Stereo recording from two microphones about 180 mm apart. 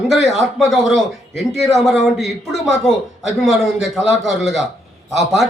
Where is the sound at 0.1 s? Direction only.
Centre (ahead or behind).